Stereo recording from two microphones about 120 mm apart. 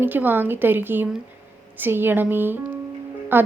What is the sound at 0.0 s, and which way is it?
A woman's voice, 15° right (ahead or behind).